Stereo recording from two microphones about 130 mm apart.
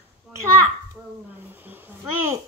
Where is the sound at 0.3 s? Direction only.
Centre (ahead or behind).